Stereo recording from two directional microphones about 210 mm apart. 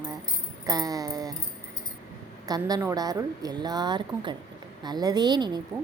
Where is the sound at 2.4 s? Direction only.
20° right (ahead or behind).